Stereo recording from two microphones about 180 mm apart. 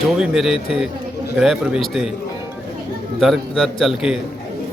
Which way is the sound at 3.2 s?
Centre (ahead or behind).